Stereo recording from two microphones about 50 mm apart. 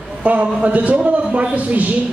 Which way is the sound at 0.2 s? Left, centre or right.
Right.